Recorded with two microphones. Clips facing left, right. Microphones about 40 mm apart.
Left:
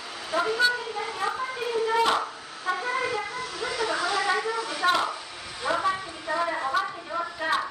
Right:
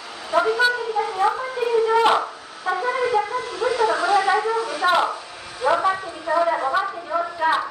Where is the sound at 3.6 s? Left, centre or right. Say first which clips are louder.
Right 8 dB; right.